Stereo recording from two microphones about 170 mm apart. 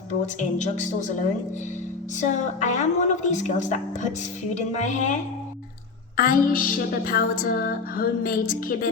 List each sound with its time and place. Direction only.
0.3 s a woman's voice: 45° left (ahead or behind)
2.2 s a woman's voice: 45° left (ahead or behind)
6.1 s music: 55° left (ahead or behind)